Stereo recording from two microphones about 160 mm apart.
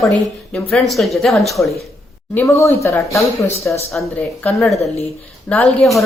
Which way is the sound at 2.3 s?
15° left (ahead or behind).